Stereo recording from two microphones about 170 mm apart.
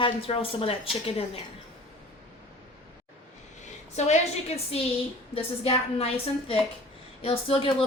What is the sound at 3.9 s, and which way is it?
A woman's voice, 40° left (ahead or behind).